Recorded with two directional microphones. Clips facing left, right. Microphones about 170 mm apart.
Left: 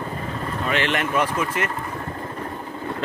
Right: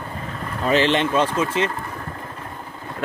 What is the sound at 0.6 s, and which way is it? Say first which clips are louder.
Speech: right 6 dB; 30° right (ahead or behind).